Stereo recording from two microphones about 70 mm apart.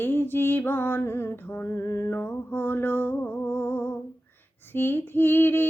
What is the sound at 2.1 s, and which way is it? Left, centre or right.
Female singing, left.